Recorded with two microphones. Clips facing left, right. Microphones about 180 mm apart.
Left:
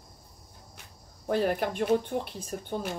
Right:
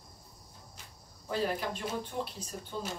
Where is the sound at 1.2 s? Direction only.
60° left (ahead or behind).